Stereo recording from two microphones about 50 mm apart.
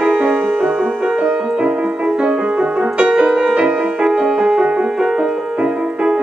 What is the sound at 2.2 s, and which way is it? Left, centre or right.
Music, centre.